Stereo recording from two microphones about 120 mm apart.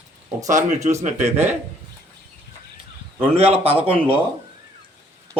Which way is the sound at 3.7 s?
15° right (ahead or behind).